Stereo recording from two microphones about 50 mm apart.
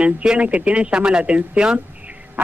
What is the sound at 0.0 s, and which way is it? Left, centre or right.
A man's voice, centre.